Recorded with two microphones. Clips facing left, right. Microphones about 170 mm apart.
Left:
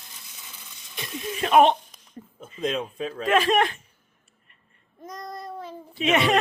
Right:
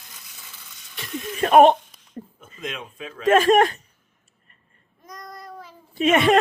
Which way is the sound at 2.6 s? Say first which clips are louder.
Left 7 dB; 35° left (ahead or behind).